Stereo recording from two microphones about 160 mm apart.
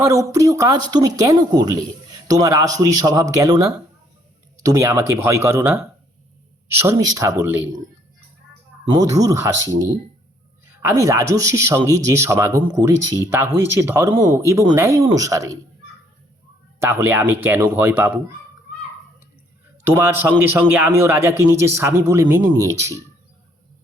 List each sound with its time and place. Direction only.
0.0 s a man's voice: 20° right (ahead or behind)
8.9 s a man's voice: 20° right (ahead or behind)
16.8 s a man's voice: 15° right (ahead or behind)
19.9 s a man's voice: 15° right (ahead or behind)